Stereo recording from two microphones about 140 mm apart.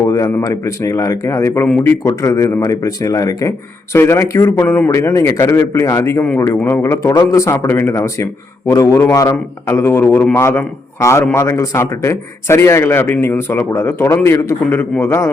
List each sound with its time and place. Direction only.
0.0 s a man's voice: 25° left (ahead or behind)